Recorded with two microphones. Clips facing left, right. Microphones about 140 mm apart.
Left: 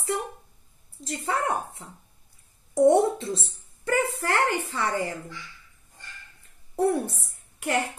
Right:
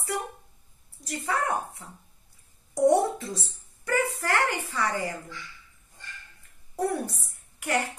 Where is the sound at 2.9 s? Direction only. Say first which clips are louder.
Left 2 dB; 25° left (ahead or behind).